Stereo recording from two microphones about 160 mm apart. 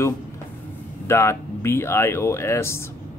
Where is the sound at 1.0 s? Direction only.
15° left (ahead or behind).